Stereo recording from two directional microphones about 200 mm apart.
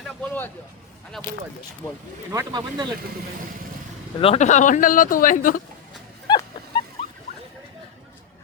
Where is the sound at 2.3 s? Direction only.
20° right (ahead or behind).